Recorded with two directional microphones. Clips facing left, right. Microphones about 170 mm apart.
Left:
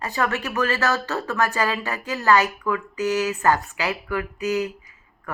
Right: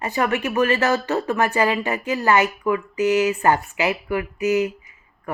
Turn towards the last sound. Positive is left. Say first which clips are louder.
# right 4 dB
turn(degrees=-20)  # may be behind; listen again after turning